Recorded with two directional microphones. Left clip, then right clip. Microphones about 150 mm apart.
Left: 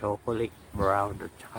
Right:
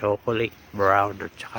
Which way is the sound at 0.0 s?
30° right (ahead or behind).